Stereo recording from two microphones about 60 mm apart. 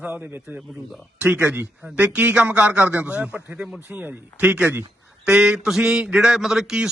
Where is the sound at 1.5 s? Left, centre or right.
Right.